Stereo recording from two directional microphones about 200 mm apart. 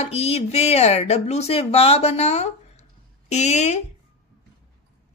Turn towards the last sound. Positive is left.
turn(degrees=35)  # may be behind; listen again after turning